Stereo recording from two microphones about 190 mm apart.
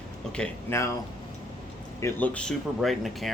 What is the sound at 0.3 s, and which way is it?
Speech, 15° left (ahead or behind).